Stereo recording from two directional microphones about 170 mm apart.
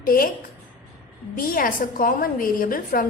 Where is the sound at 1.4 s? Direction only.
55° left (ahead or behind).